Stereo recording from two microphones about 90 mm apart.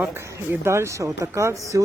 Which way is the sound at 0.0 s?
20° right (ahead or behind).